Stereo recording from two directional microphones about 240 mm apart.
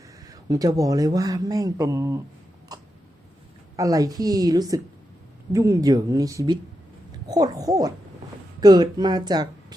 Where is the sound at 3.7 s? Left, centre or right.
Centre.